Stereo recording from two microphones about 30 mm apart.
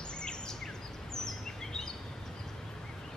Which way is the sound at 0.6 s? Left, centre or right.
Centre.